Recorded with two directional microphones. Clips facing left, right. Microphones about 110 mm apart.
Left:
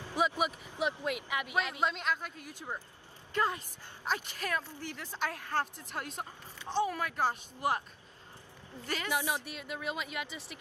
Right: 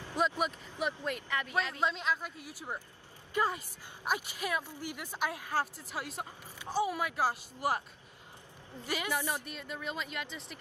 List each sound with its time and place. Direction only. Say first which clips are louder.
0.1 s a woman's voice: left 1 dB; 5° left (ahead or behind)
8.8 s a woman's voice: right 1 dB; 10° right (ahead or behind)
9.1 s speech: left 1 dB; 15° left (ahead or behind)